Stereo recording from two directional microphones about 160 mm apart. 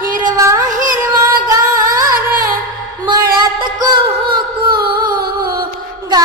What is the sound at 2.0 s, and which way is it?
Music, 60° right (ahead or behind).